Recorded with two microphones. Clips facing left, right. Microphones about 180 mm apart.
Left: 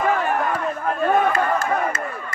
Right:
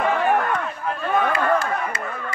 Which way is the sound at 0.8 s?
45° left (ahead or behind).